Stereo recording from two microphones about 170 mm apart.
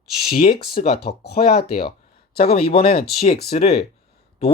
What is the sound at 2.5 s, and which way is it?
Speech, 35° left (ahead or behind).